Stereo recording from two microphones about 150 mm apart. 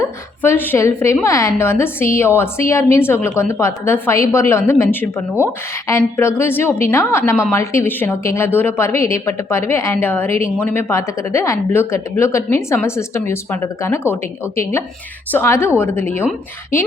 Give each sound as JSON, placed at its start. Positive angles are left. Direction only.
{"t": 0.0, "sound": "speech", "side_deg": 15}